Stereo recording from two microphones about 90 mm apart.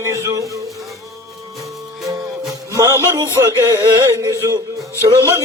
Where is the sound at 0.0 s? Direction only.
35° right (ahead or behind).